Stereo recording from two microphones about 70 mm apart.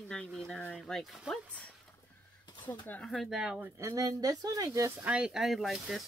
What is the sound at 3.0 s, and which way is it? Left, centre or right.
Speech, centre.